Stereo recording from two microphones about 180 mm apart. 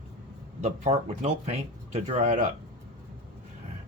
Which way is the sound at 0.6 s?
40° right (ahead or behind).